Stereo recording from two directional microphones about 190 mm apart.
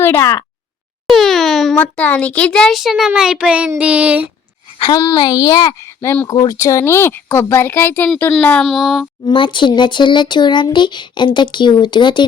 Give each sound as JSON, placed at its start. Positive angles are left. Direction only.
{"t": 0.0, "sound": "speech", "side_deg": 15}
{"t": 1.0, "sound": "a child's voice", "side_deg": 0}
{"t": 4.8, "sound": "a woman's voice", "side_deg": 20}
{"t": 9.2, "sound": "speech", "side_deg": 25}